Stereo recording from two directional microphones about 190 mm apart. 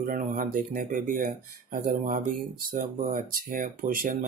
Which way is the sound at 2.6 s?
45° right (ahead or behind).